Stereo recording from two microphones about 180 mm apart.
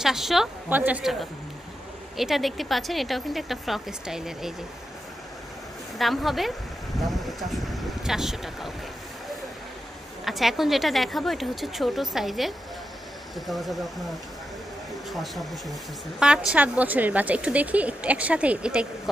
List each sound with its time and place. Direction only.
0.0 s speech: centre (ahead or behind)
5.9 s speech: centre (ahead or behind)
10.2 s speech: centre (ahead or behind)
15.0 s speech: centre (ahead or behind)